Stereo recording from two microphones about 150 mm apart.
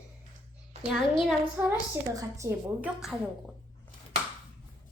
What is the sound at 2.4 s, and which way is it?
Speech, 20° right (ahead or behind).